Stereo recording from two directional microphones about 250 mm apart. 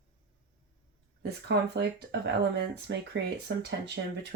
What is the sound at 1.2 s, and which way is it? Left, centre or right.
Speech, right.